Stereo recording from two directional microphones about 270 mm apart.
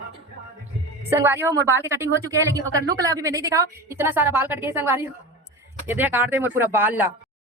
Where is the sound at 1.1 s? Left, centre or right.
Centre.